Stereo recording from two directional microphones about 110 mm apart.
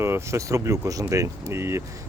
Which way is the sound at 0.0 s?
25° right (ahead or behind).